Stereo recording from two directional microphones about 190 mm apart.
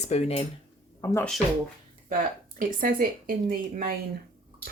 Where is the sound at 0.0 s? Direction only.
35° left (ahead or behind).